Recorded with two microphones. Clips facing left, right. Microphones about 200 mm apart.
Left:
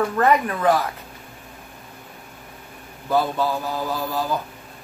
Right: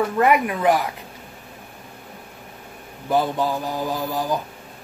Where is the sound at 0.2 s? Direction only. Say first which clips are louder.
Right 1 dB; 15° right (ahead or behind).